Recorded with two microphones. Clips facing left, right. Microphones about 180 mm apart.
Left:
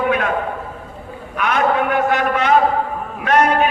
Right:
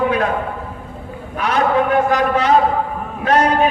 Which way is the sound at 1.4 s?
35° right (ahead or behind).